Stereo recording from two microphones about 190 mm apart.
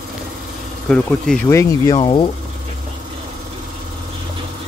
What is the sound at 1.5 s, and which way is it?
Speech, 15° left (ahead or behind).